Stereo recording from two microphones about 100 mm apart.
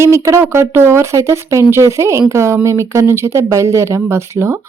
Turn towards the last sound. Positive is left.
turn(degrees=-25)  # may be behind; listen again after turning